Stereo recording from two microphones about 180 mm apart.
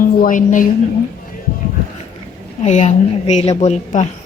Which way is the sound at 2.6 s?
40° left (ahead or behind).